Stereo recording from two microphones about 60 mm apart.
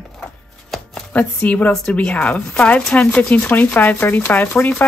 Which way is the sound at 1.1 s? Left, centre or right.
Left.